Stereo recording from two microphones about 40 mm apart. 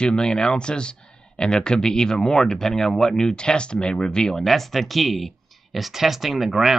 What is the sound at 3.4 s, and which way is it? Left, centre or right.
Speech, left.